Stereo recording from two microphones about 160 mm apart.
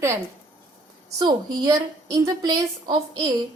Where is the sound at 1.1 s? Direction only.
25° right (ahead or behind).